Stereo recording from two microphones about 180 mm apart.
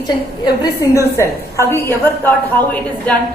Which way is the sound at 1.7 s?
10° left (ahead or behind).